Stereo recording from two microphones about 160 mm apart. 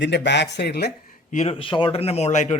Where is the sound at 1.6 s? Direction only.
30° left (ahead or behind); by 2.6 s 45° left (ahead or behind).